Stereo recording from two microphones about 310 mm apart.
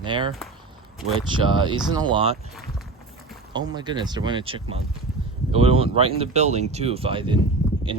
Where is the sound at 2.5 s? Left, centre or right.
Centre.